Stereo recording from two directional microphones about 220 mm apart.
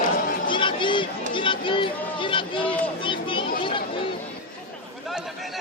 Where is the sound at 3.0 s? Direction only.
20° left (ahead or behind).